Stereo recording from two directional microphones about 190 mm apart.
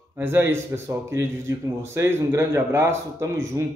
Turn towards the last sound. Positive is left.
turn(degrees=-15)  # may be behind; listen again after turning